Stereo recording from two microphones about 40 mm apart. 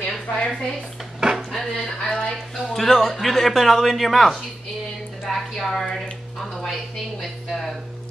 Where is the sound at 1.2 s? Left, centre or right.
Right.